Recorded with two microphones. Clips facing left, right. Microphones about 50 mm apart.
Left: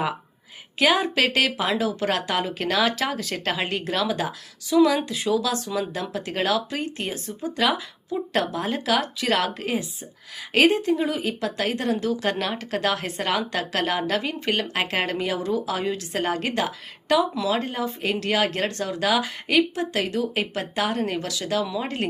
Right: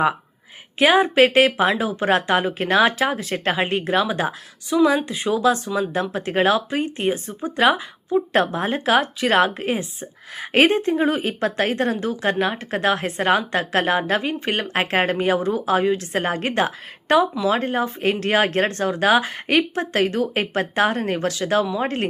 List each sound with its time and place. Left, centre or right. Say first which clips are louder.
0.8 s a woman's voice: right 6 dB; right